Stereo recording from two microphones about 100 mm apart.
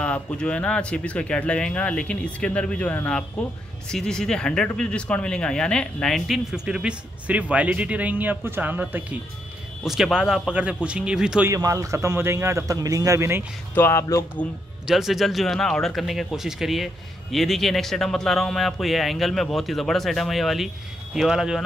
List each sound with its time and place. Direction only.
0.0 s speech: 10° left (ahead or behind); by 9.2 s 15° right (ahead or behind)
9.8 s speech: 5° right (ahead or behind)
11.4 s a man's voice: 30° right (ahead or behind)
13.7 s speech: 25° left (ahead or behind)
14.9 s speech: 5° right (ahead or behind)